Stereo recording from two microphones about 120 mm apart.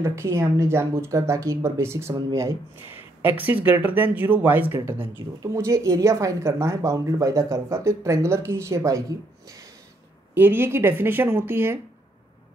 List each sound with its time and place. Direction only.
0.0 s speech: 25° right (ahead or behind)
3.2 s speech: 15° right (ahead or behind)
5.4 s speech: 25° right (ahead or behind)
10.3 s speech: 20° right (ahead or behind)